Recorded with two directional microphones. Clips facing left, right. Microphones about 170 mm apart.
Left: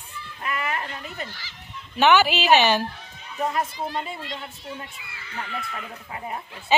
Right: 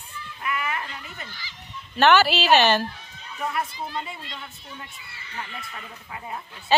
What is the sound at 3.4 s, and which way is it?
Speech, 40° left (ahead or behind).